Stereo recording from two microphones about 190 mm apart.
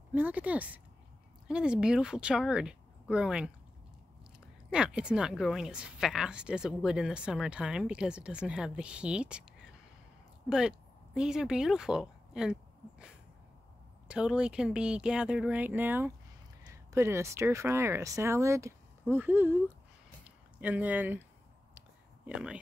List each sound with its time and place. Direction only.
0.1 s a woman's voice: 10° right (ahead or behind)
4.6 s a woman's voice: 5° right (ahead or behind)
11.1 s a woman's voice: 5° right (ahead or behind)
14.0 s a woman's voice: 5° right (ahead or behind)
20.2 s a sound: 10° right (ahead or behind)
22.2 s speech: 5° right (ahead or behind)